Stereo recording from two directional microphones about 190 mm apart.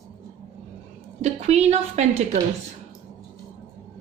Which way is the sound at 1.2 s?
35° right (ahead or behind).